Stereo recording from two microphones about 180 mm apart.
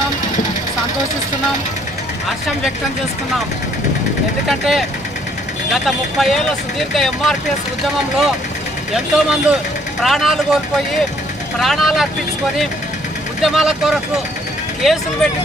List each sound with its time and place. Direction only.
4.4 s speech: centre (ahead or behind)
8.9 s speech: 5° right (ahead or behind)
13.4 s speech: centre (ahead or behind)